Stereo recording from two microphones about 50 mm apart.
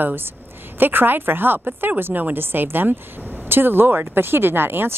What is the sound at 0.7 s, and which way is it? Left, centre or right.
A woman's voice, right.